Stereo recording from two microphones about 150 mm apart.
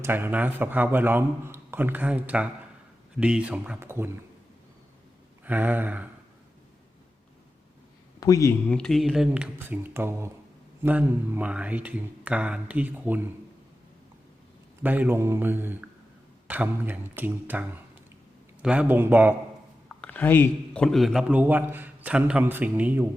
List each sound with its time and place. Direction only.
0.0 s a man's voice: 15° right (ahead or behind)
5.5 s a man's voice: 10° right (ahead or behind)
8.2 s speech: 20° left (ahead or behind)
8.7 s a man's voice: centre (ahead or behind)
14.8 s a man's voice: 10° right (ahead or behind)
19.9 s a man's voice: 10° left (ahead or behind); by 23.0 s 15° right (ahead or behind)